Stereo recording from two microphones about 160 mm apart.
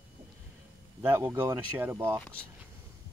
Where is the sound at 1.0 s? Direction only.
15° right (ahead or behind).